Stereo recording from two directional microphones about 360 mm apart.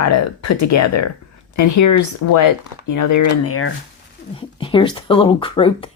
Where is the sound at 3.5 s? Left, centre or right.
Left.